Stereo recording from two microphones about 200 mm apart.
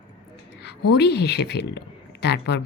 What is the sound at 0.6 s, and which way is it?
A woman's voice, 60° left (ahead or behind).